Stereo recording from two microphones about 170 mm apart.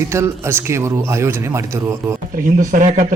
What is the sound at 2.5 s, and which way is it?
Speech, 50° right (ahead or behind).